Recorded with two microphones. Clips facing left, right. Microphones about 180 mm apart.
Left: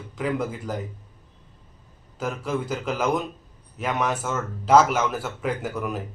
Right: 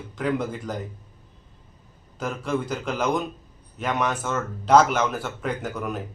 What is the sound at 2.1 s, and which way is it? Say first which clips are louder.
A man's voice: right 1 dB; 5° left (ahead or behind).